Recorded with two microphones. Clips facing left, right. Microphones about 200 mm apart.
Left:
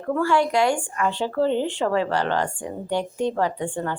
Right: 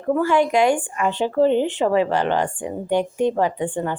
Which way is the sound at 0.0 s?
15° right (ahead or behind).